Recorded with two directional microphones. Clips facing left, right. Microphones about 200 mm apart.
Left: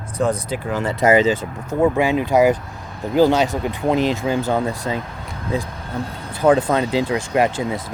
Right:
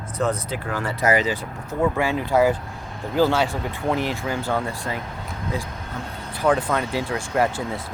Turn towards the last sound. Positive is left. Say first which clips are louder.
# left 4 dB
turn(degrees=15)  # may be behind; listen again after turning